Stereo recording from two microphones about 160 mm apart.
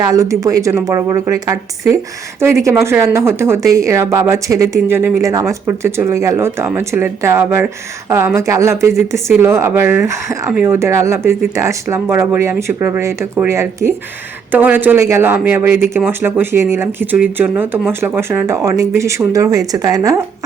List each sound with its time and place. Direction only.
0.1 s a woman's voice: 20° right (ahead or behind)